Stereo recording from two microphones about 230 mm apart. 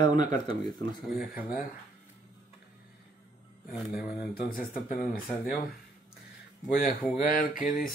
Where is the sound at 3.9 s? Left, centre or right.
Left.